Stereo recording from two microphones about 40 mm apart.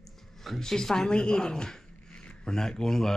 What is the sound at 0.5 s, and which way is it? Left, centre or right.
Speech, centre.